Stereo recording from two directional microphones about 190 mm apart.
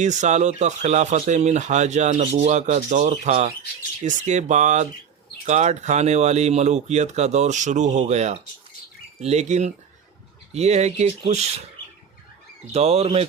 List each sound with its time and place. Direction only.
0.0 s speech: 40° right (ahead or behind)
12.7 s speech: 35° right (ahead or behind)